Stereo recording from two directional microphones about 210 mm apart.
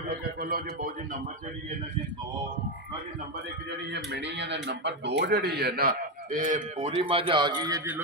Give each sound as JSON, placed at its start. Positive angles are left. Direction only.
{"t": 0.4, "sound": "speech", "side_deg": -45}
{"t": 3.9, "sound": "speech", "side_deg": -55}
{"t": 6.9, "sound": "a man's voice", "side_deg": -25}